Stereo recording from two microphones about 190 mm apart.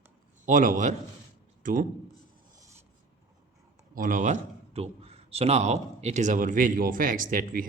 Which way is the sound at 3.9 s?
45° right (ahead or behind).